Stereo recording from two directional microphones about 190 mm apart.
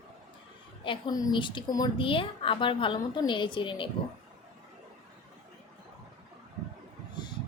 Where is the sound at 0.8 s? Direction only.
25° left (ahead or behind).